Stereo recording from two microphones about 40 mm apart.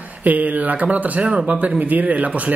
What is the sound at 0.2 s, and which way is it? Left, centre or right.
Speech, right.